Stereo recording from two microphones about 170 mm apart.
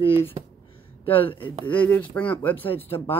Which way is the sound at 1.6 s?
10° left (ahead or behind).